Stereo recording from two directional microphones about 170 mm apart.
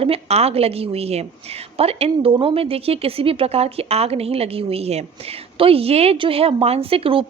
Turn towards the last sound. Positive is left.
turn(degrees=-30)  # may be behind; listen again after turning